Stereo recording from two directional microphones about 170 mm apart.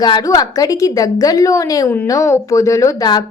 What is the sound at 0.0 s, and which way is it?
Speech, 25° left (ahead or behind).